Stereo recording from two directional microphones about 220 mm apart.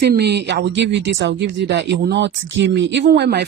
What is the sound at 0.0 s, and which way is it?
Speech, 45° right (ahead or behind).